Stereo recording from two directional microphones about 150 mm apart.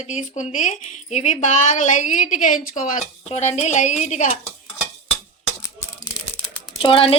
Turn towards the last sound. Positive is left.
turn(degrees=40)  # may be behind; listen again after turning